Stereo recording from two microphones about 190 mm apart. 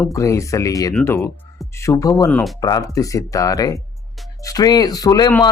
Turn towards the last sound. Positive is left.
turn(degrees=20)  # may be behind; listen again after turning